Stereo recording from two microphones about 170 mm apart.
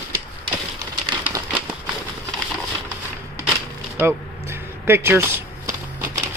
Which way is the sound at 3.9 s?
15° right (ahead or behind).